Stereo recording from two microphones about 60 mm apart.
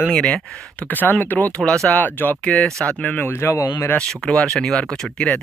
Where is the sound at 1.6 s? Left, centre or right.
Centre.